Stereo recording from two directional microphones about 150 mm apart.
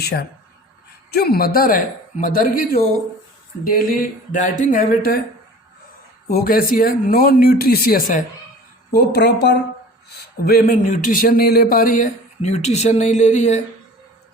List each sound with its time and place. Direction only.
0.0 s a man's voice: 90° left
6.2 s speech: 80° left
8.9 s a woman's voice: 90° left
10.4 s a man's voice: 80° left; by 13.6 s 50° left (ahead or behind)